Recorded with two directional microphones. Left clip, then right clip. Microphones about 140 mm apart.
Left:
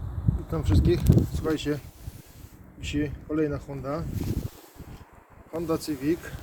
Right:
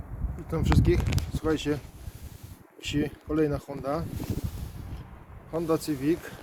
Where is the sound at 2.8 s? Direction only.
35° right (ahead or behind).